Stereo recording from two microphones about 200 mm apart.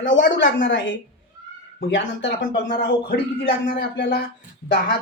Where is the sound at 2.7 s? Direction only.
55° left (ahead or behind).